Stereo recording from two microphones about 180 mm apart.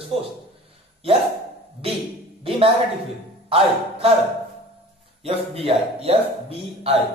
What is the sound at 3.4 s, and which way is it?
Music, 30° right (ahead or behind).